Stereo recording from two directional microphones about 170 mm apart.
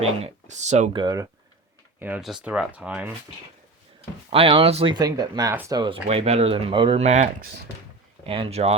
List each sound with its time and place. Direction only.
0.0 s speech: 35° right (ahead or behind)
0.9 s speech: 25° right (ahead or behind)
2.0 s speech: 10° right (ahead or behind)
4.3 s speech: 35° right (ahead or behind)
8.3 s speech: 35° right (ahead or behind)